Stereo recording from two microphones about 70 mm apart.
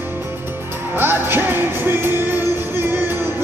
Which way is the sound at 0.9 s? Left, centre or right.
Right.